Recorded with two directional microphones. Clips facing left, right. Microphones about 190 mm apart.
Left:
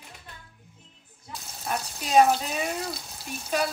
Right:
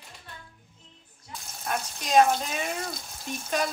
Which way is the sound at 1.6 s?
5° left (ahead or behind).